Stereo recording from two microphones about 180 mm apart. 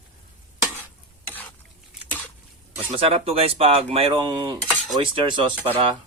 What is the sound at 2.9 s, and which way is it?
Speech, 30° right (ahead or behind).